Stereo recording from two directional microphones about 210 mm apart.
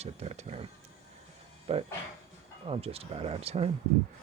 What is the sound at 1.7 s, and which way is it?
Speech, 30° right (ahead or behind).